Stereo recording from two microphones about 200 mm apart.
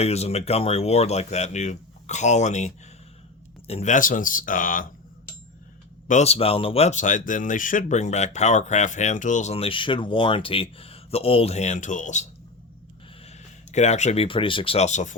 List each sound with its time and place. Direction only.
0.0 s speech: 30° left (ahead or behind)
6.1 s speech: 35° left (ahead or behind)
13.2 s speech: 35° left (ahead or behind)